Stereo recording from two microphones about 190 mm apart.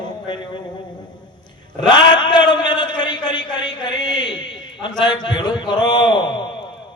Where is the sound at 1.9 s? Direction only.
25° left (ahead or behind).